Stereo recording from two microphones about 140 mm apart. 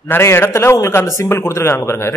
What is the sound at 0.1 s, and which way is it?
A man's voice, 15° left (ahead or behind).